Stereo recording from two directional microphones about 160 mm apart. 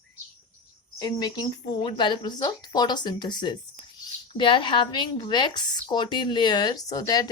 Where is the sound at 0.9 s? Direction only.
25° left (ahead or behind).